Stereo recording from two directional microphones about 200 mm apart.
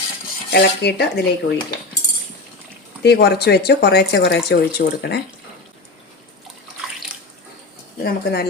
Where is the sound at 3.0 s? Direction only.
55° left (ahead or behind).